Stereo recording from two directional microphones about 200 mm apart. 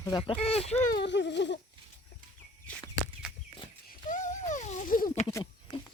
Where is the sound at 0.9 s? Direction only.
60° left (ahead or behind).